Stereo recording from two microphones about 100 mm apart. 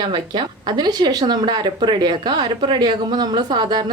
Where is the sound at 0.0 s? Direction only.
45° right (ahead or behind).